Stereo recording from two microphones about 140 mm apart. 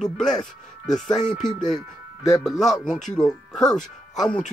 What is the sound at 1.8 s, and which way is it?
Speech, 25° left (ahead or behind).